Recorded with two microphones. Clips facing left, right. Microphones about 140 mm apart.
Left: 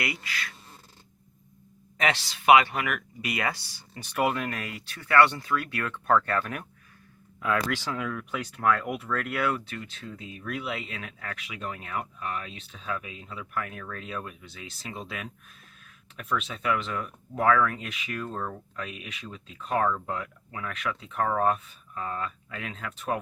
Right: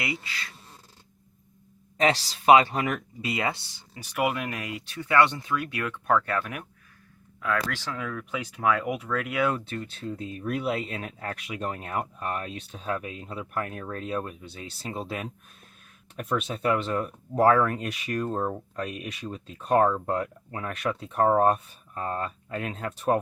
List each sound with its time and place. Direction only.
0.0 s speech: 25° right (ahead or behind)
2.0 s speech: 35° right (ahead or behind)
3.9 s speech: 10° right (ahead or behind)
7.4 s speech: 5° left (ahead or behind)
10.1 s speech: 40° right (ahead or behind)